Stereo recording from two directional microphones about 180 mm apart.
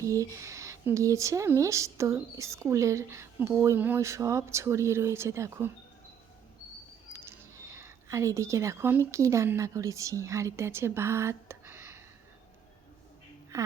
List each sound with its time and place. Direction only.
0.0 s speech: 20° right (ahead or behind)
7.1 s a sound: 15° right (ahead or behind)
9.1 s a woman's voice: 15° right (ahead or behind)
13.5 s speech: 15° right (ahead or behind)